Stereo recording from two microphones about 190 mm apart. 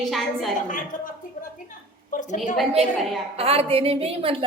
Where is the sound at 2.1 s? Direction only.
45° left (ahead or behind).